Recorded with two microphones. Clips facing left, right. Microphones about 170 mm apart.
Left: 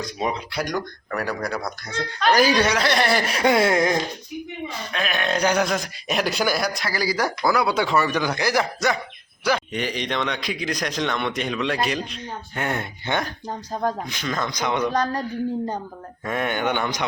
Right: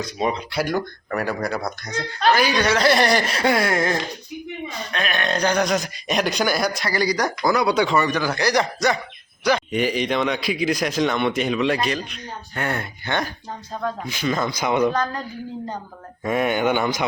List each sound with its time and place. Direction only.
0.0 s speech: 5° left (ahead or behind)
2.3 s speech: 40° left (ahead or behind)
2.7 s a sound: centre (ahead or behind); by 3.9 s 20° left (ahead or behind)
4.9 s speech: centre (ahead or behind)
8.2 s a sound: 10° left (ahead or behind)
9.4 s speech: 5° left (ahead or behind)
9.7 s speech: 10° right (ahead or behind)
12.0 s speech: 30° left (ahead or behind)
12.5 s a sound: 20° left (ahead or behind)
14.1 s speech: 5° right (ahead or behind)
16.2 s speech: 10° right (ahead or behind)